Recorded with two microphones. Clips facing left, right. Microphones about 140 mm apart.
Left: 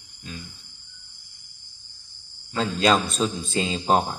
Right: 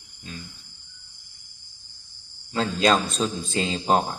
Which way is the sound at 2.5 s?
20° left (ahead or behind).